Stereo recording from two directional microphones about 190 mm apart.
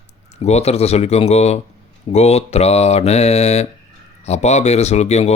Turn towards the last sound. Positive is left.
turn(degrees=35)  # may be behind; listen again after turning